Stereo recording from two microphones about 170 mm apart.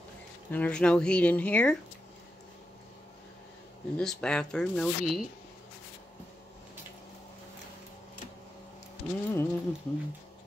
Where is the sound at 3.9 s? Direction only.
5° left (ahead or behind).